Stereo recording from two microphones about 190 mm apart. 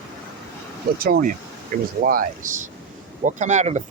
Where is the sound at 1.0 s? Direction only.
50° right (ahead or behind).